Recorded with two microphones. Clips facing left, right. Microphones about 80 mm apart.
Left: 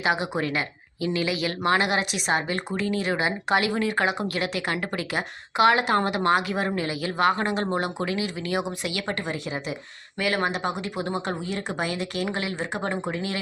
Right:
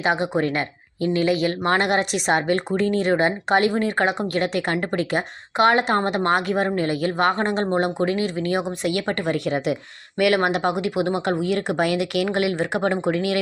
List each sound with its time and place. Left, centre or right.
0.0 s speech: right